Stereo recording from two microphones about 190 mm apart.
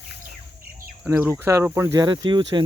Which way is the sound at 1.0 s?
10° right (ahead or behind).